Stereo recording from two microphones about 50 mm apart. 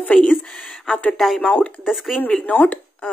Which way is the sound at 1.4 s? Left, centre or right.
Left.